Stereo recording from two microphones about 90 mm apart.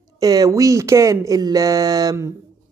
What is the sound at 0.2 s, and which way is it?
Speech, 45° right (ahead or behind).